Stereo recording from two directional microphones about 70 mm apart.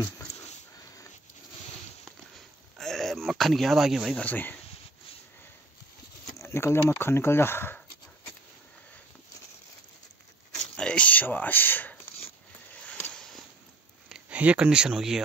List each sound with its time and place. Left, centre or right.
2.3 s a sound: centre
4.2 s speech: left
6.3 s speech: left
10.5 s speech: centre
14.3 s speech: centre